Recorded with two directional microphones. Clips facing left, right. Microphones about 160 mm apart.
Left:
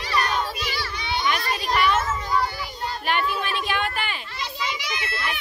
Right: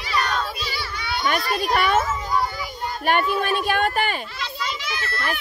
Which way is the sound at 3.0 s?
50° right (ahead or behind).